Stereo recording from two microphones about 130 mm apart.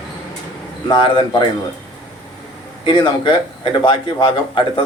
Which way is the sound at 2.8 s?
35° left (ahead or behind).